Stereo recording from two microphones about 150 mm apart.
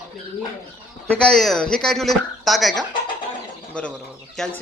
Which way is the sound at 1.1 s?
5° left (ahead or behind).